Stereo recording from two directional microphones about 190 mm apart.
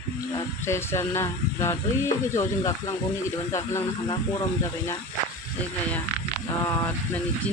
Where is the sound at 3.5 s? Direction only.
15° left (ahead or behind).